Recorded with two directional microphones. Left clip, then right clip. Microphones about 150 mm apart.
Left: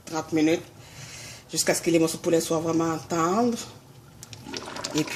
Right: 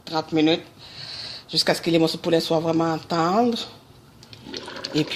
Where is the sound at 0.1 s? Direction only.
15° right (ahead or behind).